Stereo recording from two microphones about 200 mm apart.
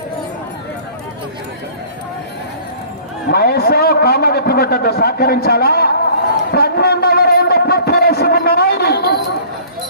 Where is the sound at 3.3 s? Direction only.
50° left (ahead or behind).